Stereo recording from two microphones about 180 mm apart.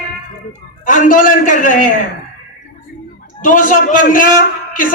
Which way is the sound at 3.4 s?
45° left (ahead or behind).